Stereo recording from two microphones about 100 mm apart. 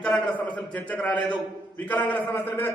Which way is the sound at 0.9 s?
15° left (ahead or behind).